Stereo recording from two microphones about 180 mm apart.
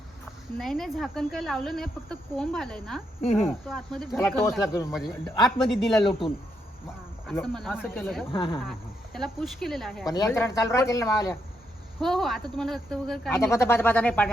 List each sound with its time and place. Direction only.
0.6 s speech: centre (ahead or behind)
4.2 s speech: 15° left (ahead or behind)
4.9 s speech: centre (ahead or behind)
6.0 s speech: 30° left (ahead or behind)
7.4 s speech: centre (ahead or behind)
8.3 s speech: 25° left (ahead or behind)
9.1 s speech: centre (ahead or behind)
10.1 s speech: 20° left (ahead or behind)
11.9 s speech: centre (ahead or behind)
13.3 s speech: 15° left (ahead or behind)